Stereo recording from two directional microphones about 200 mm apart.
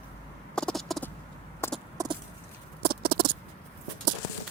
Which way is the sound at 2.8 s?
50° right (ahead or behind).